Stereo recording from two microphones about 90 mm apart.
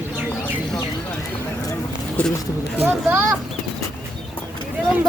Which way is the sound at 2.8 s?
25° right (ahead or behind).